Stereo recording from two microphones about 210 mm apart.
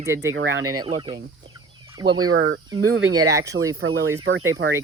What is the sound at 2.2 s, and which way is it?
Speech, 85° right.